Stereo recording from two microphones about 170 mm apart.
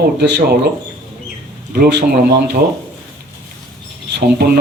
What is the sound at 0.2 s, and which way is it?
Speech, 75° right (ahead or behind).